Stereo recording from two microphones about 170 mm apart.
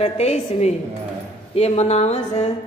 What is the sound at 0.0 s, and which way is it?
A woman's voice, 40° left (ahead or behind).